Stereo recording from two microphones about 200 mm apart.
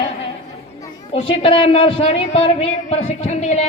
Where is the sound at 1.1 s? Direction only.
30° left (ahead or behind).